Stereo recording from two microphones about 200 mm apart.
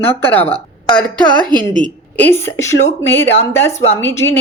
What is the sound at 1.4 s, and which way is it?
Speech, 25° right (ahead or behind).